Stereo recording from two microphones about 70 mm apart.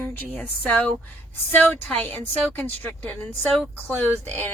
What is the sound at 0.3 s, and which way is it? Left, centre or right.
Speech, left.